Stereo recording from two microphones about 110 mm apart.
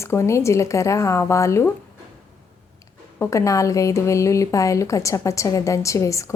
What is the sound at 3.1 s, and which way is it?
A woman's voice, 25° left (ahead or behind).